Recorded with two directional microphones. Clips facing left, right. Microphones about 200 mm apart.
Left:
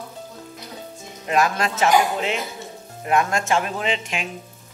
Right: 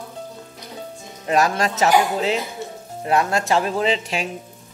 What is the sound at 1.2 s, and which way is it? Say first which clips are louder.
Speech: right 2 dB; 35° right (ahead or behind).